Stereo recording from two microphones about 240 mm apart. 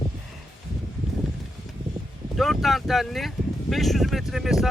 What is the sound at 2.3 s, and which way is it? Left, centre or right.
Speech, centre.